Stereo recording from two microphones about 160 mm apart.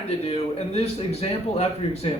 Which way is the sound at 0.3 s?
40° left (ahead or behind).